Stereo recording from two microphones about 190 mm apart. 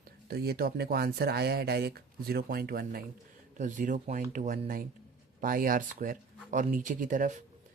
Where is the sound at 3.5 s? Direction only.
40° right (ahead or behind).